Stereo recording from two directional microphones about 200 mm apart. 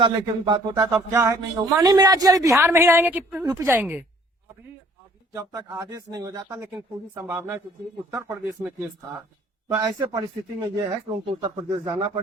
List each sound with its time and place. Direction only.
0.0 s a man's voice: 20° right (ahead or behind)
5.3 s a man's voice: 15° right (ahead or behind)
9.7 s speech: 20° right (ahead or behind)